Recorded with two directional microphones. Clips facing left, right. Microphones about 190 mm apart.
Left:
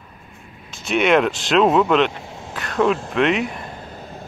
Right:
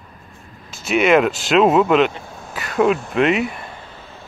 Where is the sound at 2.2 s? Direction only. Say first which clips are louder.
Left 1 dB; 20° left (ahead or behind).